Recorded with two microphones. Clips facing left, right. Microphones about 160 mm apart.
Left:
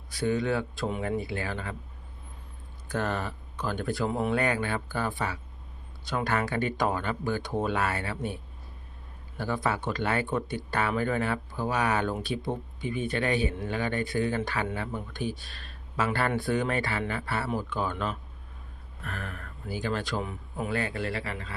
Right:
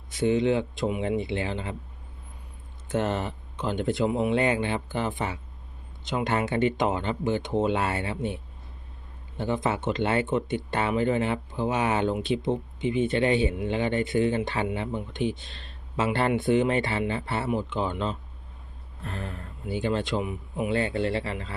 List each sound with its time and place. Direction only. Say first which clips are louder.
0.1 s speech: right 4 dB; 20° right (ahead or behind)
2.9 s speech: right 4 dB; 25° right (ahead or behind)
9.4 s speech: right 3 dB; 25° right (ahead or behind)